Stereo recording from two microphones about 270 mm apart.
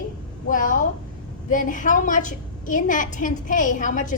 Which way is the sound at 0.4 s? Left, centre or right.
Left.